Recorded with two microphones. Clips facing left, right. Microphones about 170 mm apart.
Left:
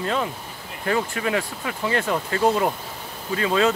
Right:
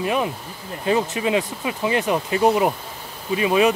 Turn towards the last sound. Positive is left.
turn(degrees=-15)  # may be behind; listen again after turning